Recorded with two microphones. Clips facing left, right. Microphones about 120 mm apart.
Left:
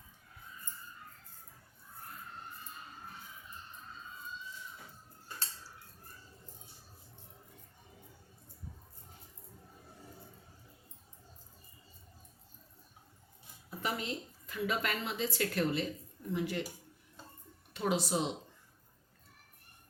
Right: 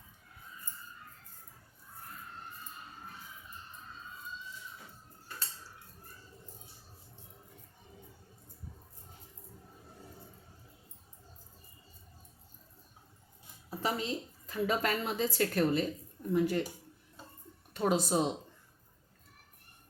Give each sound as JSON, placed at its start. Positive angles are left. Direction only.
{"t": 13.7, "sound": "a woman's voice", "side_deg": -30}
{"t": 17.7, "sound": "speech", "side_deg": -45}